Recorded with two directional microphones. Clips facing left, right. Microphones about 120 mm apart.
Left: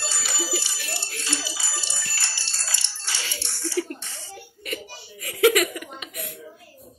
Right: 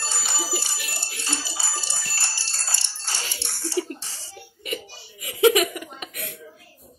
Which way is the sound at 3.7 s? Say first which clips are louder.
Right 1 dB; 35° right (ahead or behind).